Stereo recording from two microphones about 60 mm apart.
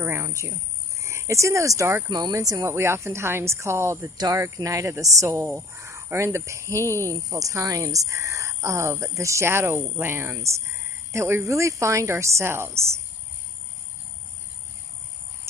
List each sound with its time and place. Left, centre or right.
0.0 s speech: right
0.3 s speech: right
2.1 s speech: right
2.7 s speech: right
4.6 s speech: right
5.7 s cricket: right
6.1 s speech: right